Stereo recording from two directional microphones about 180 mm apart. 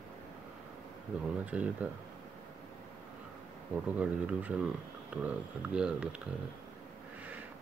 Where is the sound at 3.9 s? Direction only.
10° right (ahead or behind).